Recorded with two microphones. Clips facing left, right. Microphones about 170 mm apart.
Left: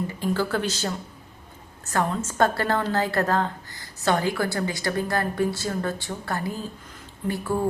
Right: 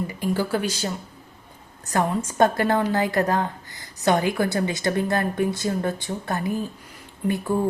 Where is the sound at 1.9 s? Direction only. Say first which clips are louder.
Right 2 dB; 15° right (ahead or behind).